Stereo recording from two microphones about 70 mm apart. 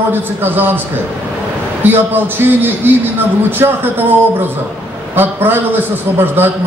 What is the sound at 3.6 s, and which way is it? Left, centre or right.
Speech, right.